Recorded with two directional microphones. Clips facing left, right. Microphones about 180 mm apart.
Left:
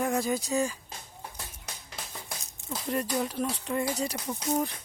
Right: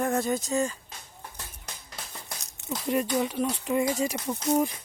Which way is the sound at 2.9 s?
Centre (ahead or behind).